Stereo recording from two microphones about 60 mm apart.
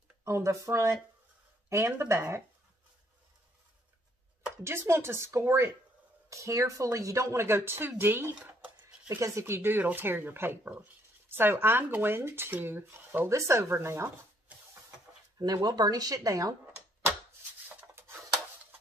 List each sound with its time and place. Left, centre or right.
0.2 s speech: right
1.7 s speech: right
4.6 s speech: right
6.3 s speech: right
7.3 s speech: right
8.5 s dishes: right
9.2 s speech: right
13.3 s speech: right
15.3 s speech: right
17.6 s rub: right